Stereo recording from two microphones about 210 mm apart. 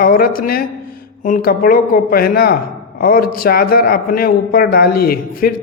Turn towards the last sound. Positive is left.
turn(degrees=45)  # may be behind; listen again after turning